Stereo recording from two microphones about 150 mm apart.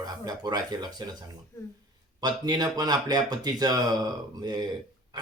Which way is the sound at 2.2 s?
25° right (ahead or behind).